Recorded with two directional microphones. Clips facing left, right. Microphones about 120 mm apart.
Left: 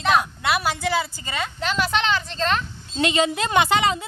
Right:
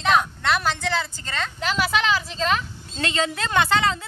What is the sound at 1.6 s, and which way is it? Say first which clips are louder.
Speech: even; centre (ahead or behind).